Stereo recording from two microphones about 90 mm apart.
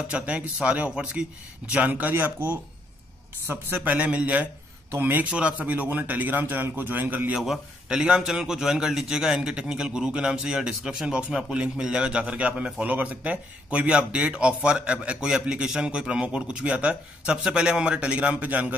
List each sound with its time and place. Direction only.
0.1 s a man's voice: 15° right (ahead or behind)
3.7 s a man's voice: 15° right (ahead or behind)
7.3 s a man's voice: 5° right (ahead or behind)